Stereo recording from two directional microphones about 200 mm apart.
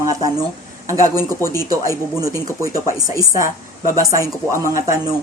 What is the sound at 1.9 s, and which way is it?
Speech, 15° left (ahead or behind).